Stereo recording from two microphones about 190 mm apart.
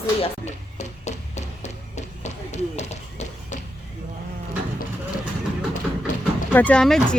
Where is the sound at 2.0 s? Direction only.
35° left (ahead or behind).